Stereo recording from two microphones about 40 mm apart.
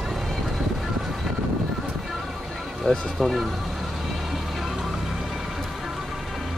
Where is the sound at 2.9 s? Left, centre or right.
Left.